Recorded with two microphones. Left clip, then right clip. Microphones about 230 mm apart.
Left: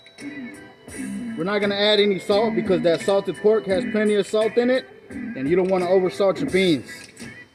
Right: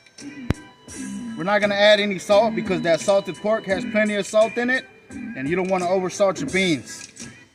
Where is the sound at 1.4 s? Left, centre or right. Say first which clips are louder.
Right 4 dB; right.